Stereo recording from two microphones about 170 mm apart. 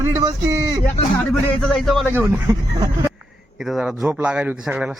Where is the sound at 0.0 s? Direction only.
20° right (ahead or behind).